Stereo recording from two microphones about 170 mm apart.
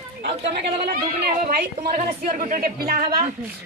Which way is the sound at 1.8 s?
55° right (ahead or behind).